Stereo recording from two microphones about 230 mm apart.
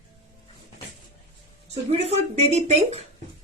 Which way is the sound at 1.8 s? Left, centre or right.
Right.